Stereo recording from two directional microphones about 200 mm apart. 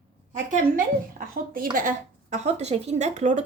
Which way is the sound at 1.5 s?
45° right (ahead or behind).